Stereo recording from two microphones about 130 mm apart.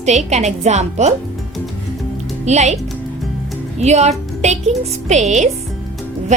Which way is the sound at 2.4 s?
60° right (ahead or behind).